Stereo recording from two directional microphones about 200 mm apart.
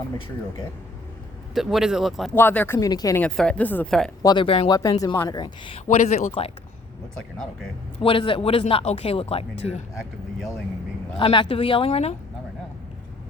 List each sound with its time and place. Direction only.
1.5 s a woman's voice: centre (ahead or behind)
2.3 s speech: 10° left (ahead or behind)
3.2 s a woman's voice: 5° left (ahead or behind)
4.2 s speech: 20° left (ahead or behind)
7.9 s speech: 25° left (ahead or behind)
11.2 s speech: 25° left (ahead or behind)